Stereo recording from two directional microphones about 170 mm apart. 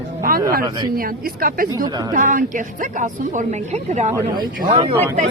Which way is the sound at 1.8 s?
25° right (ahead or behind).